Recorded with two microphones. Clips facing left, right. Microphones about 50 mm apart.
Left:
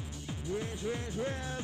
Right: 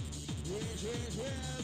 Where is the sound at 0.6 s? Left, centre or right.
Left.